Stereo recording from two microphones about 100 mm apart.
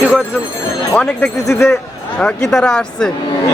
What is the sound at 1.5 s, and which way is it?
Speech, 30° left (ahead or behind).